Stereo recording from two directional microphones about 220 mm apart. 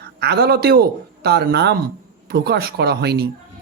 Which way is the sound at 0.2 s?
45° right (ahead or behind).